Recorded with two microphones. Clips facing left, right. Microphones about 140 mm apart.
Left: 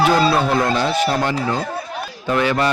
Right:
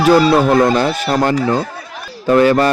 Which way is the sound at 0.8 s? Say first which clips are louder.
Right 3 dB; 50° right (ahead or behind).